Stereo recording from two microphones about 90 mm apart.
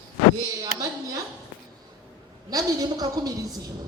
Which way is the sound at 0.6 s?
40° right (ahead or behind).